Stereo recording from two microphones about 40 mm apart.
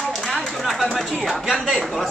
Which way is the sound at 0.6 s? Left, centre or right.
Centre.